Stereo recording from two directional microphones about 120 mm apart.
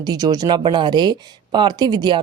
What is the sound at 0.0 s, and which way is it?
Speech, 30° right (ahead or behind).